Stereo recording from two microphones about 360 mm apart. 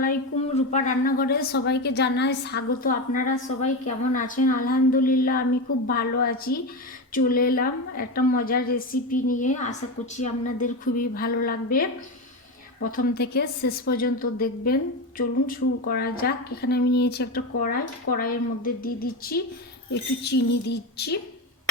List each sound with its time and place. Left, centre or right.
0.5 s a woman's voice: centre